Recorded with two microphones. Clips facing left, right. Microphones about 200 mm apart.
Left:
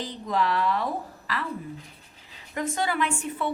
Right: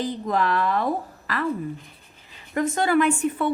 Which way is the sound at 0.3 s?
50° right (ahead or behind).